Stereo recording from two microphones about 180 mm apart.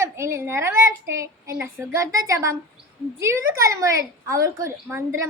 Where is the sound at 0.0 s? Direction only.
15° right (ahead or behind).